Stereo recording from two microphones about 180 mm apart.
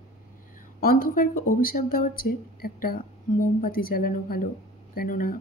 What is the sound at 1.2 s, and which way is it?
Speech, 50° left (ahead or behind).